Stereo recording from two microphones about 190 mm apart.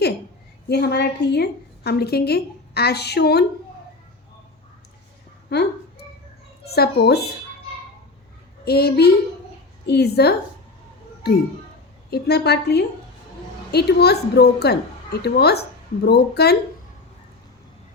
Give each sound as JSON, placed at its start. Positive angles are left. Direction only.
{"t": 0.7, "sound": "a woman's voice", "side_deg": 60}
{"t": 5.5, "sound": "a sound", "side_deg": 60}
{"t": 6.7, "sound": "a woman's voice", "side_deg": 55}
{"t": 8.6, "sound": "a woman's voice", "side_deg": 55}
{"t": 12.1, "sound": "a woman's voice", "side_deg": 60}